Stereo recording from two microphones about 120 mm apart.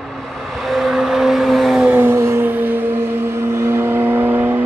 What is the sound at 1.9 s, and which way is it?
Vehicle, 20° right (ahead or behind).